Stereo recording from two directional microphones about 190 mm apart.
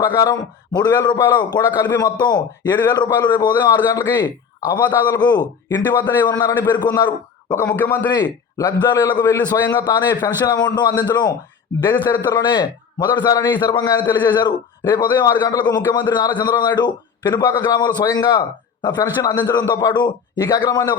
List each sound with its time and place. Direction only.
0.2 s a man's voice: 20° left (ahead or behind)
7.5 s a man's voice: 10° left (ahead or behind)
8.1 s a man's voice: 20° left (ahead or behind)